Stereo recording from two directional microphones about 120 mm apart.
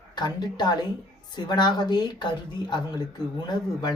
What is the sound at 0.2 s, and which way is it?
Speech, 35° left (ahead or behind).